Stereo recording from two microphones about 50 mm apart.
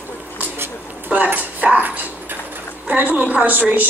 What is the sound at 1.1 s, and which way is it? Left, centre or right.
Speech, right.